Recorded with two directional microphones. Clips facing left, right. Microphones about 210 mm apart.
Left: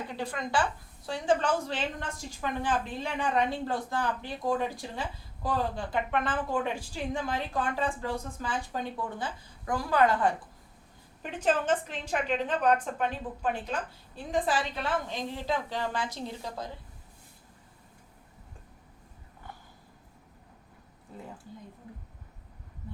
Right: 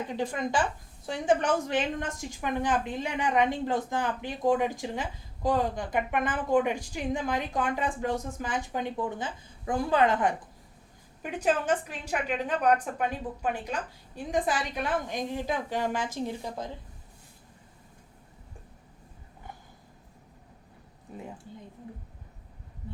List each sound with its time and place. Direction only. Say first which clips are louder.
0.1 s a woman's voice: right 2 dB; 15° right (ahead or behind)
11.4 s a woman's voice: even; 10° right (ahead or behind)
21.1 s speech: right 3 dB; 15° right (ahead or behind)